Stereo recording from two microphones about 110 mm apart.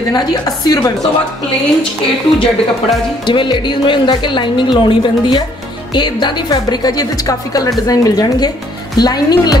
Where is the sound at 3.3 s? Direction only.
45° left (ahead or behind).